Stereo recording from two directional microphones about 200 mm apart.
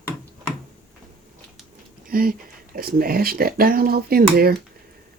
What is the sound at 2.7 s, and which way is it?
Speech, 45° right (ahead or behind).